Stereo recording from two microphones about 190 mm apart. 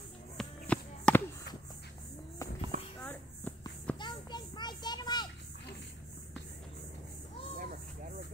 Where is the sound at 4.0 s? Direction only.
25° left (ahead or behind).